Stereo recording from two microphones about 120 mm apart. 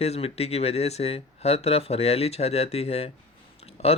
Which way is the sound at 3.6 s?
60° left (ahead or behind).